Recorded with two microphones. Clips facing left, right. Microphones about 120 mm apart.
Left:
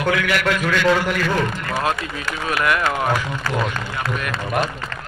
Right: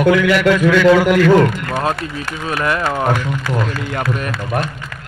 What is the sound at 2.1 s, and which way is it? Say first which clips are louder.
Speech: right 1 dB; 30° right (ahead or behind).